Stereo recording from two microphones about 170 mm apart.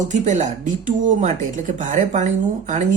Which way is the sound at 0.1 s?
45° right (ahead or behind).